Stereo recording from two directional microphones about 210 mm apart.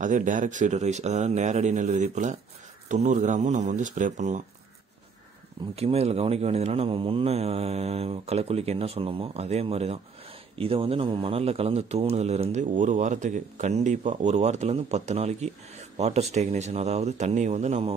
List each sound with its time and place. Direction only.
0.0 s speech: 35° right (ahead or behind)
5.8 s speech: 30° right (ahead or behind)